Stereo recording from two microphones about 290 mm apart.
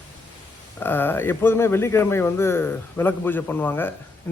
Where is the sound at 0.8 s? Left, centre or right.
Centre.